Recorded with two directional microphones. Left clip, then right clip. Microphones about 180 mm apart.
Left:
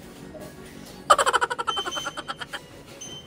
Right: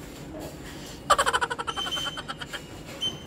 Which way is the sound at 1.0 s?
Centre (ahead or behind).